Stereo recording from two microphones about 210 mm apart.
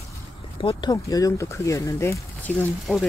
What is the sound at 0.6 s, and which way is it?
Speech, 20° left (ahead or behind).